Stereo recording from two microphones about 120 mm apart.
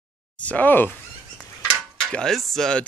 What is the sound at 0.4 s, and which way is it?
Speech, 10° left (ahead or behind).